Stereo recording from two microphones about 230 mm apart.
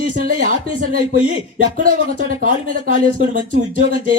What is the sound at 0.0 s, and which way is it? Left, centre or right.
Speech, right.